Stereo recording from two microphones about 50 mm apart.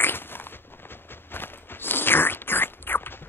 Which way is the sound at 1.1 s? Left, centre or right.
Left.